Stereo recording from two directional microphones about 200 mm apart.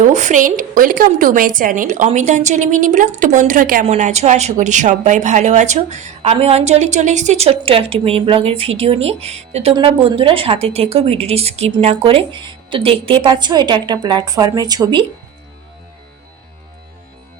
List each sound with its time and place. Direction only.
0.0 s a woman's voice: 35° right (ahead or behind); by 15.0 s 20° right (ahead or behind)